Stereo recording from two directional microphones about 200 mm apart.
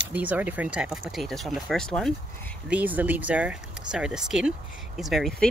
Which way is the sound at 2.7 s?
5° right (ahead or behind).